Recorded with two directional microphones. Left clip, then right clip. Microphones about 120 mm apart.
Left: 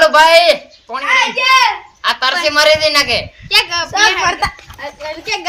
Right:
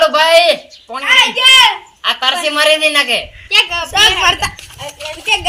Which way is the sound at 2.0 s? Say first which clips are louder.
Even; 40° left (ahead or behind).